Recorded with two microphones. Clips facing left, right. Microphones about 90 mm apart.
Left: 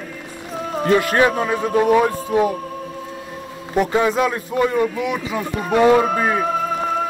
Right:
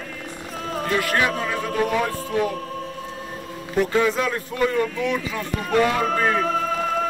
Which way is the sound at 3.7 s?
20° left (ahead or behind).